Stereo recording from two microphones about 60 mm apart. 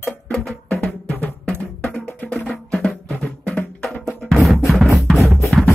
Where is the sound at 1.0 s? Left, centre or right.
Left.